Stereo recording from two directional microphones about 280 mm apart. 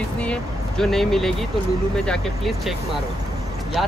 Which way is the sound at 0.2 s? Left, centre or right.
Centre.